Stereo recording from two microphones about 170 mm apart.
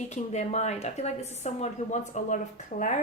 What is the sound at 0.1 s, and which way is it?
A woman's voice, 45° left (ahead or behind).